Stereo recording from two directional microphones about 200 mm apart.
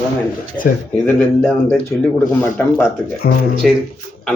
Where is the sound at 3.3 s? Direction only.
65° left (ahead or behind).